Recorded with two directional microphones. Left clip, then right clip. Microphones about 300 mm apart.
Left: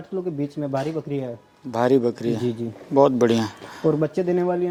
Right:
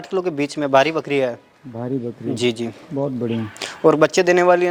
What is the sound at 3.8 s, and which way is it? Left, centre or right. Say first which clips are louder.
Speech: right 8 dB; centre.